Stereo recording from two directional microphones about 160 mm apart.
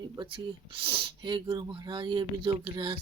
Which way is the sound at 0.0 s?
30° right (ahead or behind).